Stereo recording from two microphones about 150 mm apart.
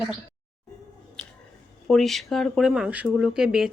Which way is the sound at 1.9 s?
Centre (ahead or behind).